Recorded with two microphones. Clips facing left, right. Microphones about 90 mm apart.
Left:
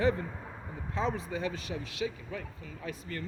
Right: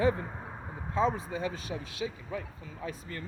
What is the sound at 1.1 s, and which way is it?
Speech, 25° right (ahead or behind).